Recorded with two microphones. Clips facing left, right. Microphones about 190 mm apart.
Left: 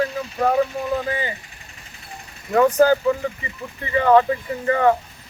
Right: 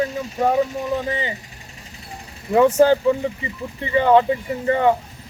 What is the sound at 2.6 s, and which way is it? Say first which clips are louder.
Speech: right 1 dB; 25° right (ahead or behind).